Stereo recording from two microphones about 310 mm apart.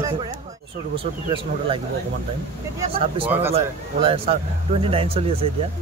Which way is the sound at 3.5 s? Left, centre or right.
Centre.